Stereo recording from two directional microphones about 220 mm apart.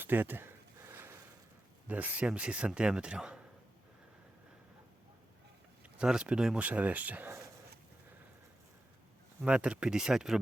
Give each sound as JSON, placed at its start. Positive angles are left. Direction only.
{"t": 0.0, "sound": "a sound", "side_deg": -10}
{"t": 1.9, "sound": "speech", "side_deg": -5}
{"t": 5.8, "sound": "speech", "side_deg": -5}
{"t": 9.4, "sound": "speech", "side_deg": -5}